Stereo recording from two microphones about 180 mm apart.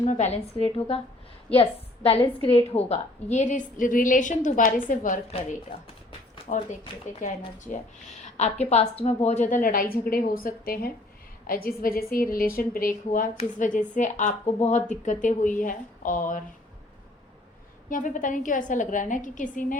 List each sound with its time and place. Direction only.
0.0 s a woman's voice: 40° left (ahead or behind)
2.0 s a woman's voice: 30° left (ahead or behind)
6.1 s a sound: 35° left (ahead or behind)
7.2 s a woman's voice: 45° left (ahead or behind)
17.8 s a woman's voice: 45° left (ahead or behind)